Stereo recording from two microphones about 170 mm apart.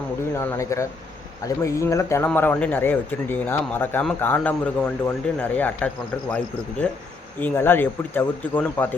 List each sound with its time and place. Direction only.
0.3 s speech: 15° left (ahead or behind)